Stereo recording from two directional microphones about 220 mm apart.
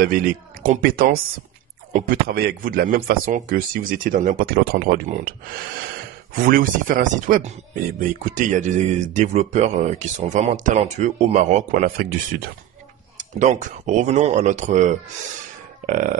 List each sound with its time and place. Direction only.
0.0 s speech: 40° right (ahead or behind)
6.3 s speech: 40° right (ahead or behind)